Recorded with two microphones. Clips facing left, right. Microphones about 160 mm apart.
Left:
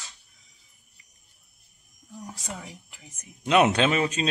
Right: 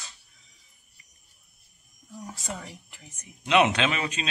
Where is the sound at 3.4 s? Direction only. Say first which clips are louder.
Left 2 dB; 40° left (ahead or behind).